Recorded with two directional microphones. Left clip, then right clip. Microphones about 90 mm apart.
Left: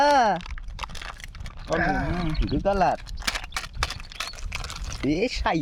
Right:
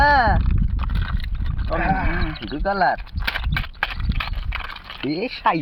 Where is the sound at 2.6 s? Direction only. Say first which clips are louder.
Right 3 dB; 80° left.